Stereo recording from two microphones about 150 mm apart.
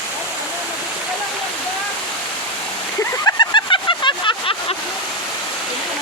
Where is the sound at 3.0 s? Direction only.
25° left (ahead or behind).